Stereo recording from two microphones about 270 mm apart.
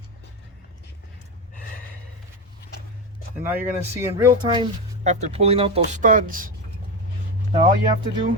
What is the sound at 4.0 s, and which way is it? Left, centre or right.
Speech, centre.